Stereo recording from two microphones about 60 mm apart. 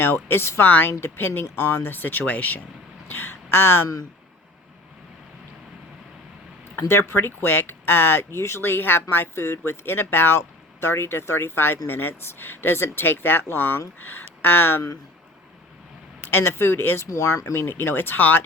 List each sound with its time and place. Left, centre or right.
0.0 s speech: left
6.8 s speech: left
16.2 s speech: left
17.1 s speech: left